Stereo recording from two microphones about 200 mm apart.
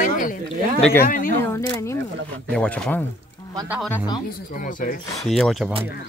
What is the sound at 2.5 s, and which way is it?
Speech, 5° left (ahead or behind).